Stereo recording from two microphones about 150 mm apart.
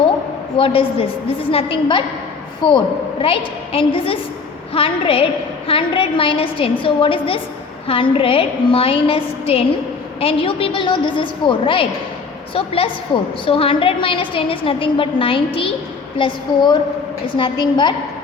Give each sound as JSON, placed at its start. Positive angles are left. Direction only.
{"t": 0.5, "sound": "a woman's voice", "side_deg": 35}